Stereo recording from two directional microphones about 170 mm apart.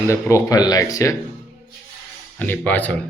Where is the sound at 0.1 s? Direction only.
15° left (ahead or behind).